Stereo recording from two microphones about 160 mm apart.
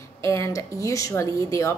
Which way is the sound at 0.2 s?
20° left (ahead or behind).